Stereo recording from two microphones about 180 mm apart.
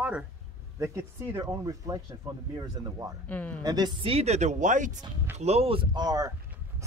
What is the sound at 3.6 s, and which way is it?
Speech, 20° right (ahead or behind).